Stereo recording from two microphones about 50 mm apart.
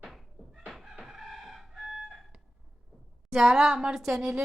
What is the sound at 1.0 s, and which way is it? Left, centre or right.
Chicken, centre.